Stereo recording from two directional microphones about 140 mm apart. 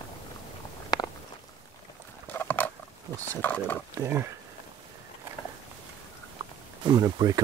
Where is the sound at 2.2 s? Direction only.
15° left (ahead or behind).